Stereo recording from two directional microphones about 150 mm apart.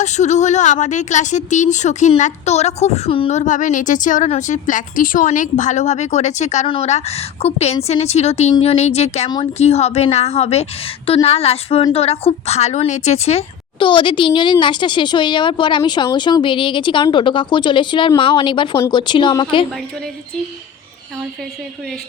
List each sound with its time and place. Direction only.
0.0 s speech: 50° left (ahead or behind)
3.3 s a woman's voice: 55° left (ahead or behind); by 19.6 s 30° left (ahead or behind)